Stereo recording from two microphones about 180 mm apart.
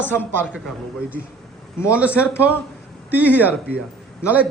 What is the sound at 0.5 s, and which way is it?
Speech, 5° right (ahead or behind).